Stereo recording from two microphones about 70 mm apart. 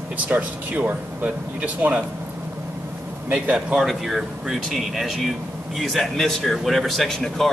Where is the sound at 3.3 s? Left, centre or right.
Centre.